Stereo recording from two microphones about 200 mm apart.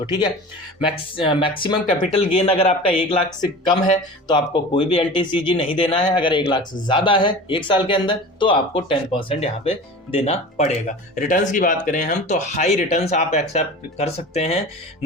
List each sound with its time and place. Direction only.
0.0 s speech: 20° left (ahead or behind)